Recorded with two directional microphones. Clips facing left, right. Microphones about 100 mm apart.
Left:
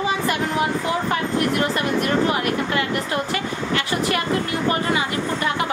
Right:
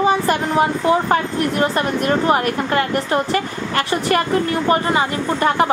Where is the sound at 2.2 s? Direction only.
40° right (ahead or behind).